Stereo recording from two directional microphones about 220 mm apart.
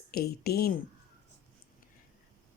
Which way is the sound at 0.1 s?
45° left (ahead or behind).